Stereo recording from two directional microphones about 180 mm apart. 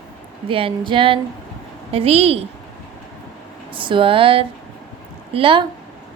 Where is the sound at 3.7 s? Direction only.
30° right (ahead or behind).